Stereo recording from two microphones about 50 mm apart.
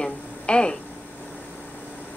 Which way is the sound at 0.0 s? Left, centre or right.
Centre.